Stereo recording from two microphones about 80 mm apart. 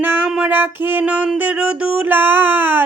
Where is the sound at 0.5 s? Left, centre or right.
Right.